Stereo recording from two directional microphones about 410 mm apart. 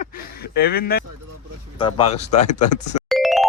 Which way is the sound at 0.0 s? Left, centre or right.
Left.